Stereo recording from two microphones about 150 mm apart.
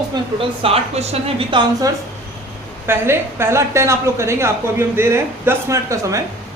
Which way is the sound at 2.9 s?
15° right (ahead or behind).